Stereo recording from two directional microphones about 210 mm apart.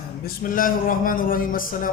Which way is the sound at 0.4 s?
40° left (ahead or behind).